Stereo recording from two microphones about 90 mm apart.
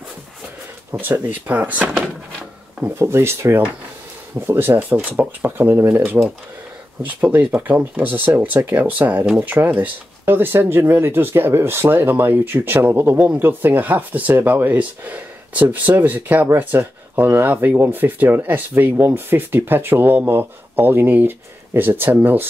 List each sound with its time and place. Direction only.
1.0 s speech: 20° right (ahead or behind)
3.0 s speech: 30° right (ahead or behind)